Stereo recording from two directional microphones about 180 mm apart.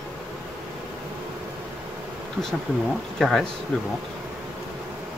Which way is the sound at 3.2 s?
Centre (ahead or behind).